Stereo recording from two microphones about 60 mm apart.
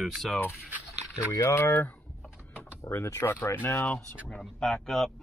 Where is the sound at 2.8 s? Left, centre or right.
Left.